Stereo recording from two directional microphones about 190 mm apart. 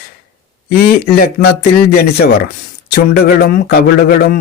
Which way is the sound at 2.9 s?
50° left (ahead or behind).